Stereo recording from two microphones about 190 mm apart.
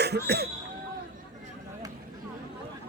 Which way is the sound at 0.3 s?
60° right (ahead or behind).